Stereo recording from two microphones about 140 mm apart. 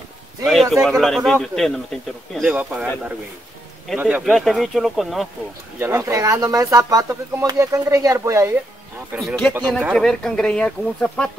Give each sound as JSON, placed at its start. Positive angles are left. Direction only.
{"t": 0.5, "sound": "speech", "side_deg": 0}
{"t": 3.9, "sound": "speech", "side_deg": -5}
{"t": 5.8, "sound": "speech", "side_deg": -20}
{"t": 9.2, "sound": "speech", "side_deg": 0}